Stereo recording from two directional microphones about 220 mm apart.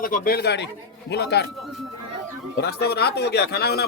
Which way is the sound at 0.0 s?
40° left (ahead or behind).